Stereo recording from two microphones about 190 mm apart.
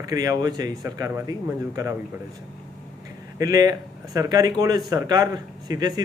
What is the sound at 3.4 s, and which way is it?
Speech, 20° right (ahead or behind).